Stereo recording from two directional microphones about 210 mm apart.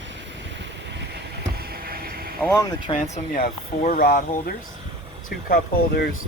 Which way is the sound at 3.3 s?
45° left (ahead or behind).